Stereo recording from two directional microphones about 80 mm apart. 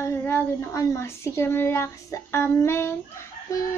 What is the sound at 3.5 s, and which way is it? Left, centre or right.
Fowl, left.